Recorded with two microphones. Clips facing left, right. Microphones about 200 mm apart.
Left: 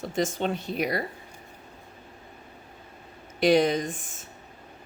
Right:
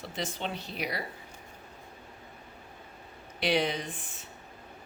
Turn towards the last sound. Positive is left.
turn(degrees=45)  # may be behind; listen again after turning